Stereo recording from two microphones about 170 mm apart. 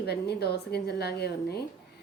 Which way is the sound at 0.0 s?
70° left (ahead or behind).